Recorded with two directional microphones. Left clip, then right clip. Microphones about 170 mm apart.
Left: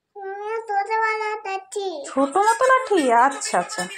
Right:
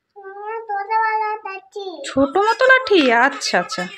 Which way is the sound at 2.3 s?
30° right (ahead or behind).